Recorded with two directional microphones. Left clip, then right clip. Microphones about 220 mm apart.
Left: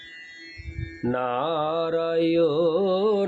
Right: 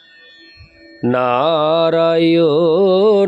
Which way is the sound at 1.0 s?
45° right (ahead or behind).